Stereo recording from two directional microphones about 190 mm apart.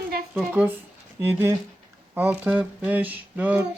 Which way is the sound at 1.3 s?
10° right (ahead or behind).